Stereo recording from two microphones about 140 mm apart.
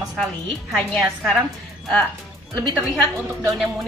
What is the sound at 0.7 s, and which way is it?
Speech, centre (ahead or behind).